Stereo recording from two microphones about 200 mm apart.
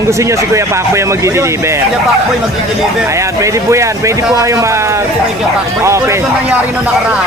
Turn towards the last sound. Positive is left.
turn(degrees=-15)  # may be behind; listen again after turning